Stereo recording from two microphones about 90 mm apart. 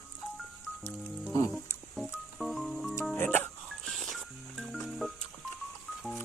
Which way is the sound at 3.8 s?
Centre (ahead or behind).